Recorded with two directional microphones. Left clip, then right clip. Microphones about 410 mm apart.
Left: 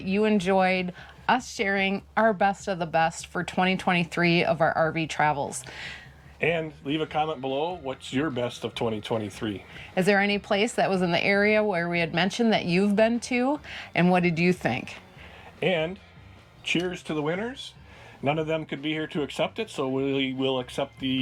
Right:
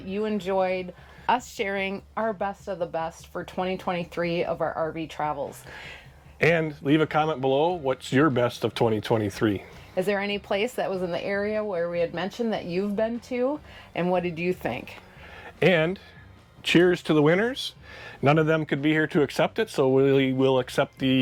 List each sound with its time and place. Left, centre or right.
0.1 s a woman's voice: centre
6.4 s speech: right
9.9 s a woman's voice: centre
15.6 s speech: right
16.6 s speech: right
18.2 s speech: right